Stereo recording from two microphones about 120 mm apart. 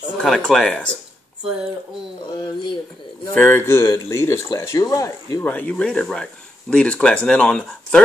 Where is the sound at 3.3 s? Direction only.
15° left (ahead or behind).